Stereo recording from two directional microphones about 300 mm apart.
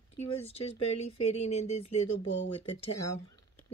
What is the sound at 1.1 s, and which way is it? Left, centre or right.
Speech, left.